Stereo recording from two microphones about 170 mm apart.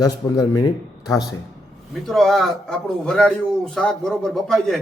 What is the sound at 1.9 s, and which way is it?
A man's voice, centre (ahead or behind).